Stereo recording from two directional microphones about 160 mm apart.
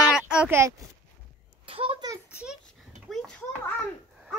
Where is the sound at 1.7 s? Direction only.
35° right (ahead or behind).